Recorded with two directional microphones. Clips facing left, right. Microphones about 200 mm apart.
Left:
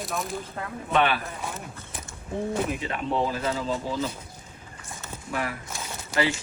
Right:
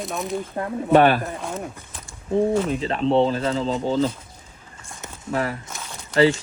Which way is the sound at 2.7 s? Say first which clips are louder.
Right 7 dB; 30° right (ahead or behind).